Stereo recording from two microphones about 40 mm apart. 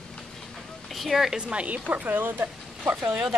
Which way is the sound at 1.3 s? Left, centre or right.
Right.